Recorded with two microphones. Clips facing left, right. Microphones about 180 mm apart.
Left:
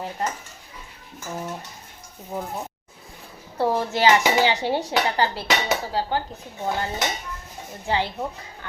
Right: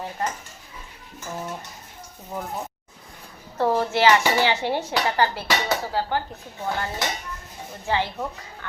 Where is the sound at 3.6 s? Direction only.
15° left (ahead or behind).